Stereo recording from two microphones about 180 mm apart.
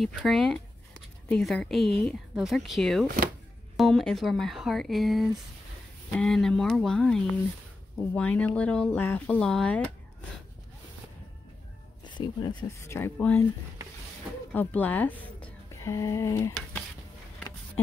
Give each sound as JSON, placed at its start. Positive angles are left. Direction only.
{"t": 0.0, "sound": "speech", "side_deg": 0}
{"t": 12.0, "sound": "speech", "side_deg": 25}
{"t": 14.5, "sound": "speech", "side_deg": 10}